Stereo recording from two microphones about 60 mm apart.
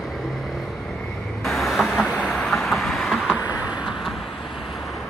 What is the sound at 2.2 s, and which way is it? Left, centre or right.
Vehicle, centre.